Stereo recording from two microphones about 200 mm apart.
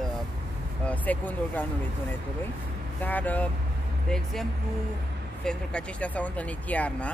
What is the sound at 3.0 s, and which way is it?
Speech, 10° left (ahead or behind).